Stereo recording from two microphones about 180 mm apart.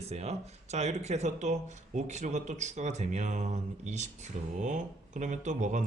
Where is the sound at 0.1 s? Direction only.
35° right (ahead or behind).